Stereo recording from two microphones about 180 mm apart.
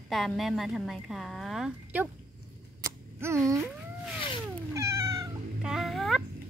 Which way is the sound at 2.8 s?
15° right (ahead or behind).